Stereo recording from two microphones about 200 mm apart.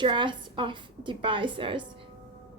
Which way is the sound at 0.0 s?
25° right (ahead or behind).